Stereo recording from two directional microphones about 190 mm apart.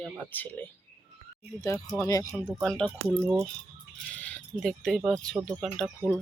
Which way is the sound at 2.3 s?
Centre (ahead or behind).